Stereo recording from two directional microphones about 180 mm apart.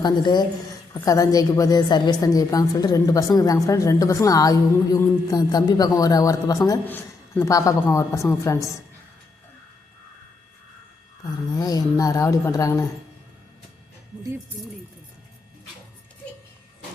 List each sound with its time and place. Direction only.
0.0 s a woman's voice: 25° left (ahead or behind)
11.5 s a woman's voice: 20° left (ahead or behind)